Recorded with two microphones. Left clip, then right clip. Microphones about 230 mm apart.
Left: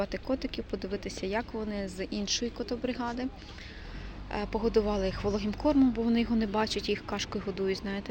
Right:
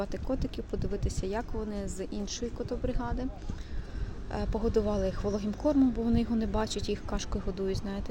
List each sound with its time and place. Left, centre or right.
0.0 s speech: centre
4.3 s speech: centre